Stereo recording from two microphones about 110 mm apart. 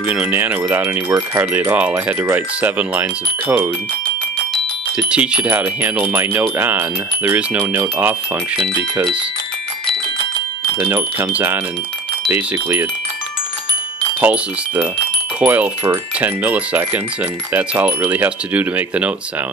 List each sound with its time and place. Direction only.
0.0 s speech: 10° right (ahead or behind)
4.9 s speech: 10° right (ahead or behind)
10.8 s wind chime: 20° right (ahead or behind)
12.3 s speech: 15° right (ahead or behind)
14.2 s speech: 15° right (ahead or behind)